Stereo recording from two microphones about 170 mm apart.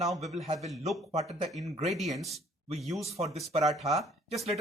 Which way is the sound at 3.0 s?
35° right (ahead or behind).